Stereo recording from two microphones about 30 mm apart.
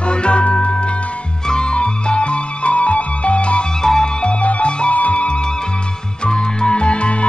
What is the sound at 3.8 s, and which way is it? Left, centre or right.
Music, left.